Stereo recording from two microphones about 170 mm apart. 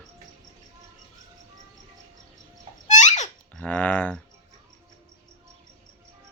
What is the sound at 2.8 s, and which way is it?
Babbling, 45° left (ahead or behind).